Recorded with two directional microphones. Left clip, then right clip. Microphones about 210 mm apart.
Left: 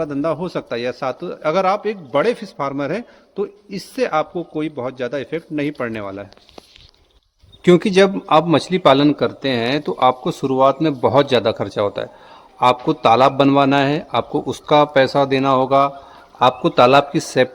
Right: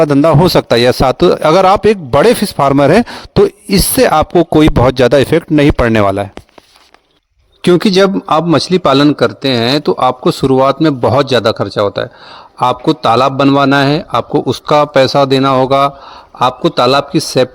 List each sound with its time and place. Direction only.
0.0 s a man's voice: 55° right (ahead or behind)
7.6 s a man's voice: 35° right (ahead or behind)
16.4 s a man's voice: 30° right (ahead or behind)